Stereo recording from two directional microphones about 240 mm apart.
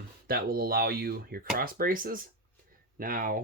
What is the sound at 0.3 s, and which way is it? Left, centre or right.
Speech, right.